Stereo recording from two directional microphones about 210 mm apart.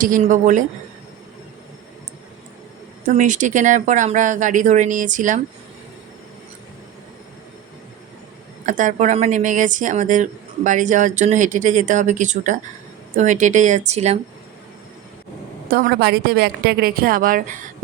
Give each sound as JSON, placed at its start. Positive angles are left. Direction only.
{"t": 0.0, "sound": "a woman's voice", "side_deg": -40}
{"t": 3.0, "sound": "a woman's voice", "side_deg": -35}
{"t": 8.6, "sound": "a woman's voice", "side_deg": -35}
{"t": 15.7, "sound": "a woman's voice", "side_deg": -50}